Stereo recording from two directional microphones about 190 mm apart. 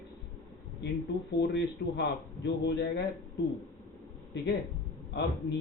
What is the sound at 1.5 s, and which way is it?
A man's voice, 65° left (ahead or behind).